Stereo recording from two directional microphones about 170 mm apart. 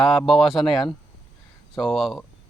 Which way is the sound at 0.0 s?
Centre (ahead or behind).